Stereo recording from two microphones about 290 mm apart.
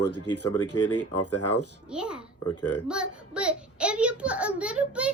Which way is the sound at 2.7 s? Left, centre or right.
Centre.